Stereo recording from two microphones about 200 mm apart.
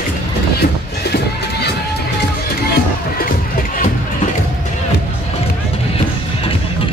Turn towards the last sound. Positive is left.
turn(degrees=30)  # may be behind; listen again after turning